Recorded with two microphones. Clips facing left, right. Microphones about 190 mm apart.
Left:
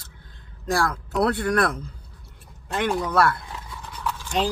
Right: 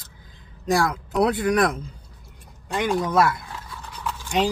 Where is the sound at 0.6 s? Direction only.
15° right (ahead or behind).